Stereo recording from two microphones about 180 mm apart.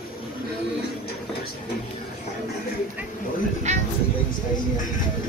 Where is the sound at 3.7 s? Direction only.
40° right (ahead or behind).